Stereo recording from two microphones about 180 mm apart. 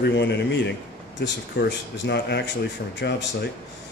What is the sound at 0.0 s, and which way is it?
Speech, 75° left (ahead or behind).